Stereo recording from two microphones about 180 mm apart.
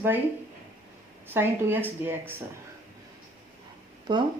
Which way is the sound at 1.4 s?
10° right (ahead or behind).